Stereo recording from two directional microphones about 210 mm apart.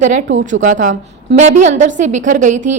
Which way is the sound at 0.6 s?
35° right (ahead or behind).